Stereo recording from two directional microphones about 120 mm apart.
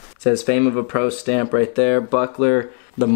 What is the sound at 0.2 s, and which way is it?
Speech, 10° left (ahead or behind).